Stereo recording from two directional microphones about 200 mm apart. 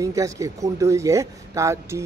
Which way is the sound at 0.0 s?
15° right (ahead or behind).